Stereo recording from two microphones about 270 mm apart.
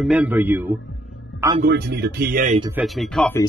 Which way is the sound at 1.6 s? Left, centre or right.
Right.